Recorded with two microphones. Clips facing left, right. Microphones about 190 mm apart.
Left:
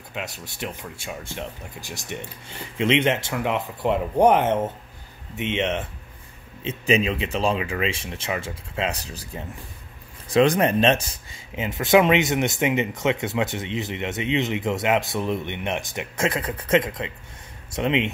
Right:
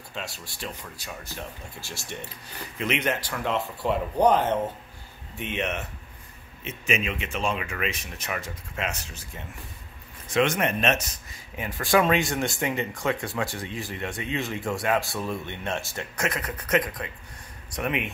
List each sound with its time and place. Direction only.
0.1 s speech: 20° left (ahead or behind)
16.3 s speech: 30° left (ahead or behind)